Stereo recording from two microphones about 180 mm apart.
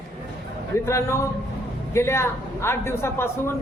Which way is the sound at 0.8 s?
15° left (ahead or behind).